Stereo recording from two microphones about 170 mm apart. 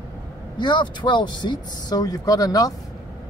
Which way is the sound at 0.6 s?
25° left (ahead or behind).